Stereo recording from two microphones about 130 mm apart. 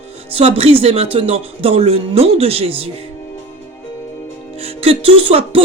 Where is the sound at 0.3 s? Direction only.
45° right (ahead or behind).